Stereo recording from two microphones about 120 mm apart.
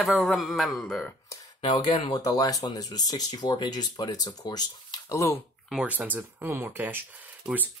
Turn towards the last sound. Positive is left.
turn(degrees=-15)  # may be behind; listen again after turning